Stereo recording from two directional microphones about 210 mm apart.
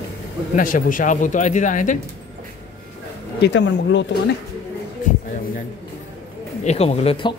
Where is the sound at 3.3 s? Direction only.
55° left (ahead or behind).